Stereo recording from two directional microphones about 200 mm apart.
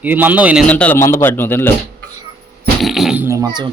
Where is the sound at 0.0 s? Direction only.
10° right (ahead or behind).